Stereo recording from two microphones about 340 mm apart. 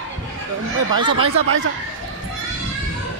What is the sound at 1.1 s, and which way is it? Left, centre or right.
Speech, right.